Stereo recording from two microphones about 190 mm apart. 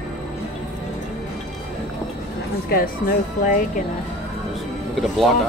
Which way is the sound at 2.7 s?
50° left (ahead or behind).